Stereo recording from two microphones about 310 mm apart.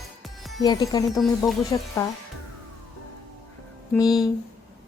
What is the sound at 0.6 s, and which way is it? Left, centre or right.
A woman's voice, centre.